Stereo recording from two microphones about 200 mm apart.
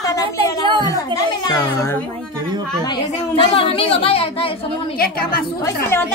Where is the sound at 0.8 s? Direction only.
15° left (ahead or behind).